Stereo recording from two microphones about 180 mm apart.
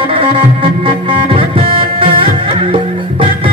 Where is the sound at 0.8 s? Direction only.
30° right (ahead or behind).